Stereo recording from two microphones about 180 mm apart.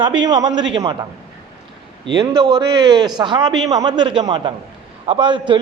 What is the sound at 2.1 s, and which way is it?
A man's voice, 20° right (ahead or behind).